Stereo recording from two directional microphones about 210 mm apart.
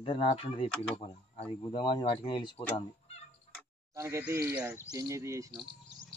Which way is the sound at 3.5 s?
35° left (ahead or behind).